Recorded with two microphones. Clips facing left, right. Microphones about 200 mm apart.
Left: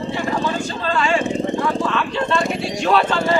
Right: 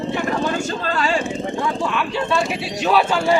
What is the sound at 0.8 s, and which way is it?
Speech, 40° right (ahead or behind).